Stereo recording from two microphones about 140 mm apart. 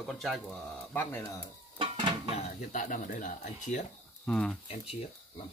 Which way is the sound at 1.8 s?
35° right (ahead or behind).